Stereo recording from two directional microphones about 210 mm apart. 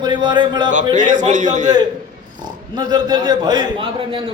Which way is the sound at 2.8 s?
20° right (ahead or behind).